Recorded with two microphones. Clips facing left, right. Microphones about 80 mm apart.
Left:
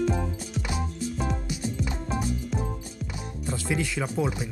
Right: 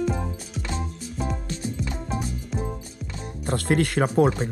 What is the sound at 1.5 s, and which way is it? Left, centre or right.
Music, centre.